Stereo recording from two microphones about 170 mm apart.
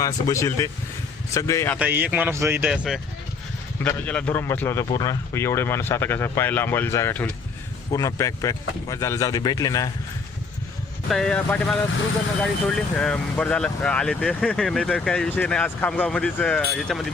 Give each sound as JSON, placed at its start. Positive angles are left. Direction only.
{"t": 0.0, "sound": "a man's voice", "side_deg": 20}
{"t": 1.8, "sound": "speech", "side_deg": -10}
{"t": 3.8, "sound": "a man's voice", "side_deg": 10}
{"t": 11.1, "sound": "speech", "side_deg": 5}